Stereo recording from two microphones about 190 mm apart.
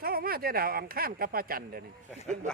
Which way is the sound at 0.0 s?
50° right (ahead or behind).